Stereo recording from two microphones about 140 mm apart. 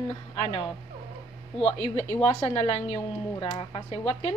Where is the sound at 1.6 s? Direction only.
45° left (ahead or behind).